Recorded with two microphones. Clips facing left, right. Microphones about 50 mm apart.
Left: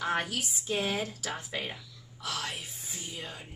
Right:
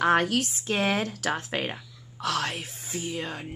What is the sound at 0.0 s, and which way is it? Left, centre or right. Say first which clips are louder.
Speech: right 9 dB; right.